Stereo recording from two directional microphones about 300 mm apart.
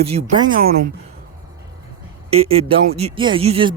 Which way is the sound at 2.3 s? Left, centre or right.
Centre.